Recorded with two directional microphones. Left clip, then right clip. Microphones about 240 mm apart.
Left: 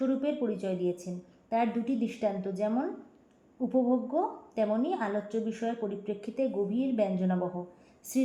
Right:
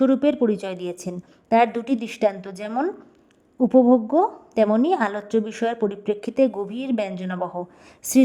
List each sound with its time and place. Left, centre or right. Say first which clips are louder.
0.0 s a woman's voice: right 11 dB; right